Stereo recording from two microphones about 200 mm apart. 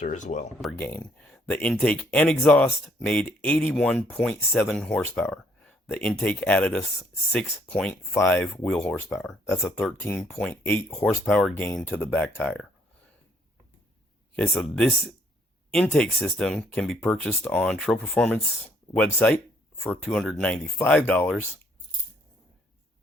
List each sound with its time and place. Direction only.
0.0 s speech: 35° left (ahead or behind)
0.6 s speech: centre (ahead or behind)
14.3 s speech: 5° left (ahead or behind)